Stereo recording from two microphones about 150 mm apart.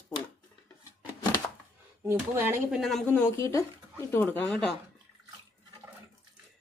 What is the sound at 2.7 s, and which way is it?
Speech, centre (ahead or behind).